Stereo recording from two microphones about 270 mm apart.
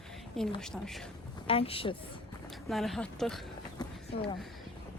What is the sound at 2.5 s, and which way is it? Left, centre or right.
Speech, centre.